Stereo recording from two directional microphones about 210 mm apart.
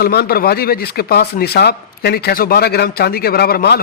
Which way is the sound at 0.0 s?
45° left (ahead or behind).